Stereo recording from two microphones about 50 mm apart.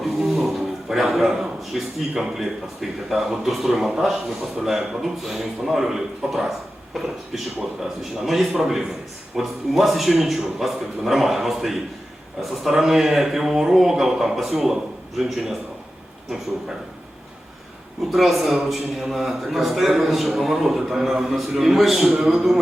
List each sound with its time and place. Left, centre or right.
0.0 s a sound: centre
1.3 s a man's voice: centre
18.1 s a man's voice: centre